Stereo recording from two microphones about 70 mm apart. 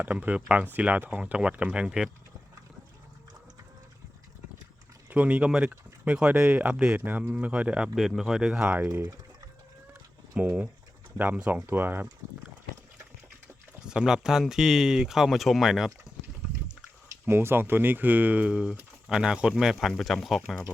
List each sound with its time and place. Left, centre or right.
0.0 s speech: right
5.0 s speech: right
7.9 s speech: centre; by 9.0 s right
10.3 s speech: centre
13.8 s speech: centre
17.2 s speech: right
18.4 s speech: centre